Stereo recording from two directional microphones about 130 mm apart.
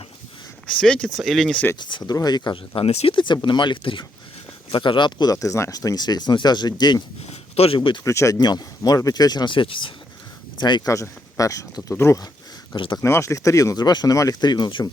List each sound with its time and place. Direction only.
0.7 s speech: 5° left (ahead or behind)
1.8 s speech: 35° left (ahead or behind)
7.3 s a sound: 50° left (ahead or behind)
7.8 s speech: 35° left (ahead or behind)
8.0 s speech: 25° left (ahead or behind)
12.7 s speech: 40° left (ahead or behind)
13.0 s speech: 20° left (ahead or behind); by 14.8 s 35° left (ahead or behind)